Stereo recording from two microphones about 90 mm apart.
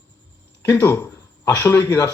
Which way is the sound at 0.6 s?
20° left (ahead or behind).